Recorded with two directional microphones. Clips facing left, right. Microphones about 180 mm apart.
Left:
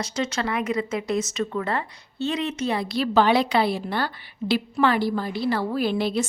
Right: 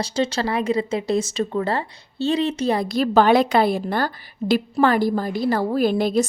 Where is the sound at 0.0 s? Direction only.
30° right (ahead or behind).